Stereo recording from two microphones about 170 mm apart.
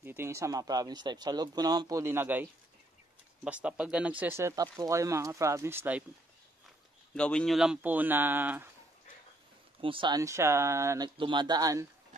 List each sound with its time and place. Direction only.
0.0 s speech: 15° right (ahead or behind)
3.4 s speech: 5° right (ahead or behind)
7.2 s speech: 5° left (ahead or behind); by 8.6 s 10° right (ahead or behind)
9.8 s speech: 30° right (ahead or behind)
11.1 s speech: 30° right (ahead or behind)